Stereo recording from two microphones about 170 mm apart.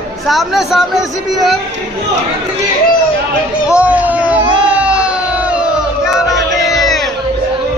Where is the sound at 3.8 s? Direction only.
10° right (ahead or behind).